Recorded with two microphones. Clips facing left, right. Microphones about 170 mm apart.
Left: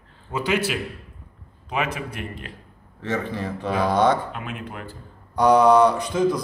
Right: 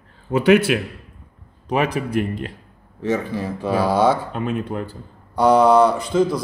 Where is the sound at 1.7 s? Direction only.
35° right (ahead or behind).